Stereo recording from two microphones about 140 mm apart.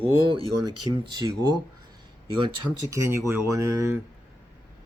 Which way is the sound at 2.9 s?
20° right (ahead or behind).